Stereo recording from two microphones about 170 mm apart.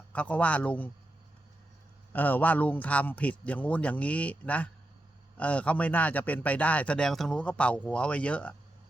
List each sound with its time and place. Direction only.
0.1 s speech: 10° left (ahead or behind)
2.1 s speech: 10° left (ahead or behind)